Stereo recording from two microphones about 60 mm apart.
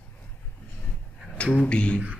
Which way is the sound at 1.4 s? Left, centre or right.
Centre.